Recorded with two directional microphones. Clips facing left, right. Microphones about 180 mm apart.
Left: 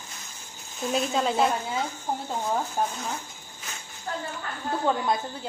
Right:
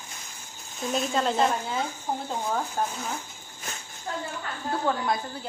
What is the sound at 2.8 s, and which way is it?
Speech, 10° left (ahead or behind).